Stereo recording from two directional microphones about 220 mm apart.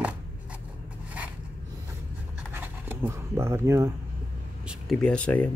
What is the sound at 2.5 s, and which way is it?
Scratch, 10° right (ahead or behind).